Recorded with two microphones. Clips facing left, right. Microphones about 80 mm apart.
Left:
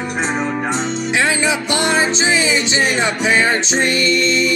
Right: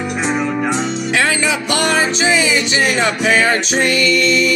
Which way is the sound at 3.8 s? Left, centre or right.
Left.